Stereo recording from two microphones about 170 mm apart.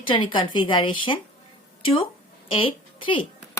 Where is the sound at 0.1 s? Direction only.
30° left (ahead or behind).